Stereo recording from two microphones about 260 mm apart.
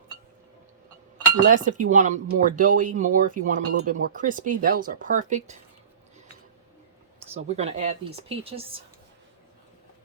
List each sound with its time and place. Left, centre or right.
1.5 s speech: right
7.4 s speech: right